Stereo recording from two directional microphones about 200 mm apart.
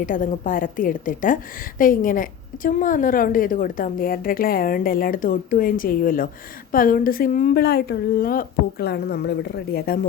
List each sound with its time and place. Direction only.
0.0 s a woman's voice: 40° left (ahead or behind)